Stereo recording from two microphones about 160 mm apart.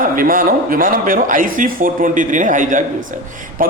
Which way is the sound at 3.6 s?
60° right (ahead or behind).